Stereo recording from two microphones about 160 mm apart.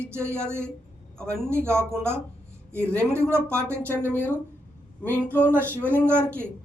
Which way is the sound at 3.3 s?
15° right (ahead or behind).